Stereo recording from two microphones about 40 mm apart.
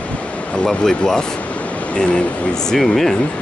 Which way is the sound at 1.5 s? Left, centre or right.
Left.